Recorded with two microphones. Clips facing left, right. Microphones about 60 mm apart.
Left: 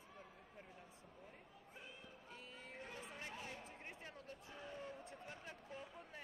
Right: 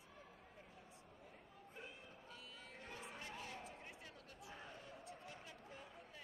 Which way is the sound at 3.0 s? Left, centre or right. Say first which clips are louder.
Right 1 dB; left.